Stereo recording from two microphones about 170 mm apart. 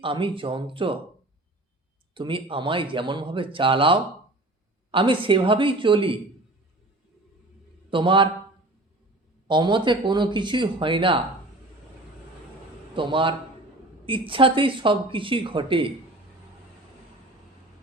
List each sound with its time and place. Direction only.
0.0 s speech: 30° right (ahead or behind)
2.1 s speech: 30° right (ahead or behind)
7.9 s a man's voice: 30° right (ahead or behind)
9.5 s speech: 25° right (ahead or behind)
12.9 s a man's voice: 30° right (ahead or behind)